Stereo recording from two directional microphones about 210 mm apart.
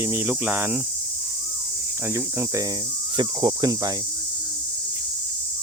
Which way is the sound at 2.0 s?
15° right (ahead or behind).